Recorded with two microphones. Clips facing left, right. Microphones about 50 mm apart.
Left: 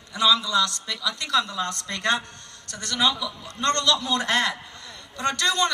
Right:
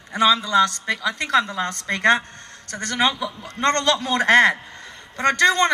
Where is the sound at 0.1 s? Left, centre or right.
Right.